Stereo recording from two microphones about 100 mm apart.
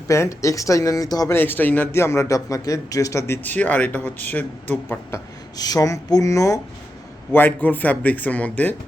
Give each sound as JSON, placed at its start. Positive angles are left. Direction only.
{"t": 0.1, "sound": "speech", "side_deg": 30}
{"t": 1.3, "sound": "a man's voice", "side_deg": 20}
{"t": 5.5, "sound": "speech", "side_deg": 40}
{"t": 7.3, "sound": "a man's voice", "side_deg": 20}